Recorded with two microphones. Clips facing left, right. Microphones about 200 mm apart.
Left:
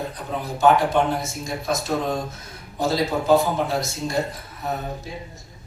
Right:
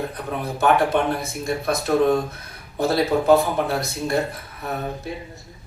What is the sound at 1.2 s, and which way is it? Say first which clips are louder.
Speech: right 4 dB; 60° right (ahead or behind).